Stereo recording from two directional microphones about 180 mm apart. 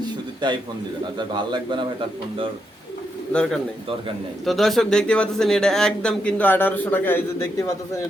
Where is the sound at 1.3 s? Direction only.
25° right (ahead or behind).